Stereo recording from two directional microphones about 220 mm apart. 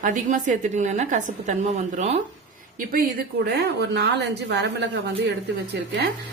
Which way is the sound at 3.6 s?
50° right (ahead or behind).